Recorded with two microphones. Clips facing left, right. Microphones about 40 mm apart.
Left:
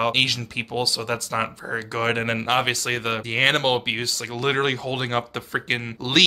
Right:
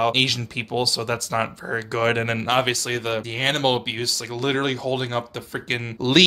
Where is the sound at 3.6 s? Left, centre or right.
Centre; by 5.6 s left.